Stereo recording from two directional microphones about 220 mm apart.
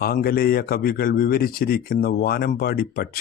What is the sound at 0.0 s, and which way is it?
Speech, 45° left (ahead or behind).